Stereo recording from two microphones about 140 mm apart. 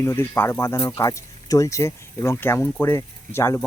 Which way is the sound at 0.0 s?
20° left (ahead or behind).